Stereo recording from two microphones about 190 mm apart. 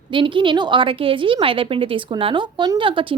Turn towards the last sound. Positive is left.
turn(degrees=-25)  # may be behind; listen again after turning